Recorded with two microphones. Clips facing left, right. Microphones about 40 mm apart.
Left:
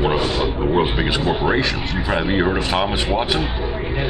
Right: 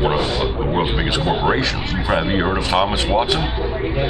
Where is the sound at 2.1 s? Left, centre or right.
Centre.